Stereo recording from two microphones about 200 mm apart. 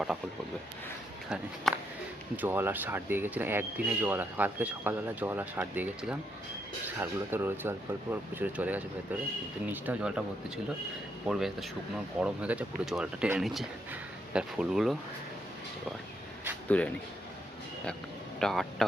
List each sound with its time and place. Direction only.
1.7 s speech: centre (ahead or behind)
9.8 s speech: 5° right (ahead or behind)
11.3 s speech: centre (ahead or behind)
16.6 s speech: 5° left (ahead or behind)
18.3 s speech: centre (ahead or behind)